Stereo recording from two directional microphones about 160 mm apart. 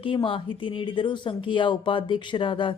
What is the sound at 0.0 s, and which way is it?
A woman's voice, 30° left (ahead or behind).